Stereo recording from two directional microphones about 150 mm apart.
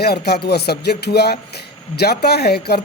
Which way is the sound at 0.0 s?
90° left.